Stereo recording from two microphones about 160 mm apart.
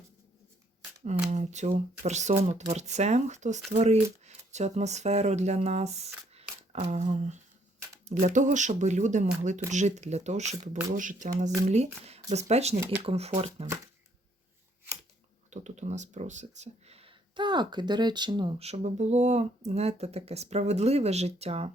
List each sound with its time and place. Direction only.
1.3 s speech: 45° right (ahead or behind)
15.4 s speech: 45° right (ahead or behind); by 18.5 s 30° right (ahead or behind)
18.6 s speech: 45° right (ahead or behind)